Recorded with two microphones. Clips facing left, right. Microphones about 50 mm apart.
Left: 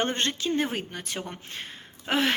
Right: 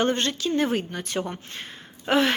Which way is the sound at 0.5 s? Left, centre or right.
Centre.